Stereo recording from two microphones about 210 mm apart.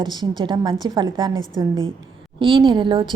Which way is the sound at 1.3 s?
70° right (ahead or behind).